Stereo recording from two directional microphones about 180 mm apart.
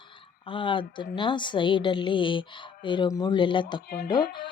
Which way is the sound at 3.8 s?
55° left (ahead or behind).